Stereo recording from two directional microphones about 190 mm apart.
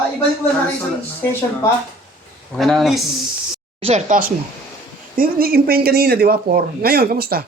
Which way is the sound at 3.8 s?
30° right (ahead or behind).